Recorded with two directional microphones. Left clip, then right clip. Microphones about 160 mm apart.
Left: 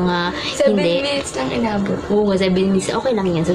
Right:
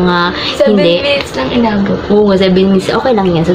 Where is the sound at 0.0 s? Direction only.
15° right (ahead or behind).